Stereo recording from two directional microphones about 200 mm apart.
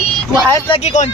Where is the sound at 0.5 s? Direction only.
30° left (ahead or behind).